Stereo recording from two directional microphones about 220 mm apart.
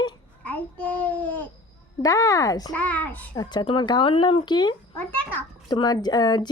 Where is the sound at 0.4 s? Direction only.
5° left (ahead or behind).